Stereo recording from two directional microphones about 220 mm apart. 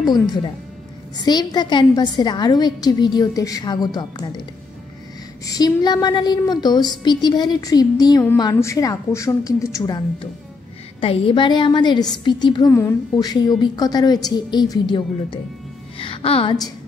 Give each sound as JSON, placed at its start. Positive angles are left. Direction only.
{"t": 1.1, "sound": "a woman's voice", "side_deg": 20}
{"t": 5.5, "sound": "a woman's voice", "side_deg": 20}